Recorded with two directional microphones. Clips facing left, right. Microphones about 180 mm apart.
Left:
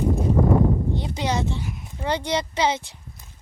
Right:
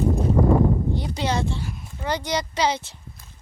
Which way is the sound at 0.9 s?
20° left (ahead or behind).